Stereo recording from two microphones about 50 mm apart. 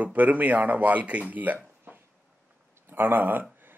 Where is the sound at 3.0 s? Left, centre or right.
Right.